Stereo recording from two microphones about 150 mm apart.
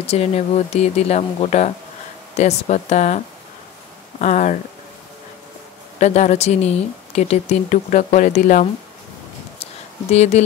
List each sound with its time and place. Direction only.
0.0 s speech: 45° left (ahead or behind)
4.2 s speech: 55° left (ahead or behind)
5.9 s speech: 50° left (ahead or behind)
9.6 s a sound: 45° left (ahead or behind)